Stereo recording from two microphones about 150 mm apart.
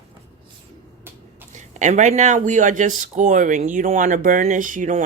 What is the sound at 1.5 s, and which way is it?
Speech, 55° right (ahead or behind).